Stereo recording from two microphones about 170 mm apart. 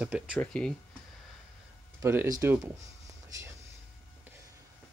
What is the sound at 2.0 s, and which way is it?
Speech, 15° right (ahead or behind).